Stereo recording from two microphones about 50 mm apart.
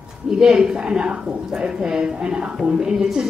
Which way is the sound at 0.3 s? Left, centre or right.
Centre.